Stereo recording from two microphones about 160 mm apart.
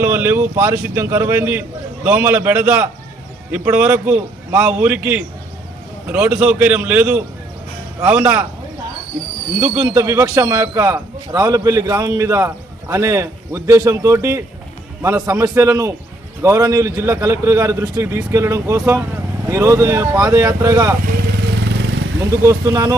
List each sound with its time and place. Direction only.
0.0 s a man's voice: 15° right (ahead or behind)
9.8 s a man's voice: 20° right (ahead or behind)
21.3 s vehicle: 90° right
22.3 s a man's voice: 20° right (ahead or behind)